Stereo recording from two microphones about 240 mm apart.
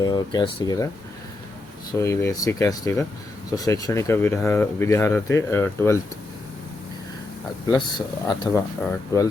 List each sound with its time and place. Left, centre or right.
0.0 s speech: centre
1.9 s speech: centre
7.7 s speech: centre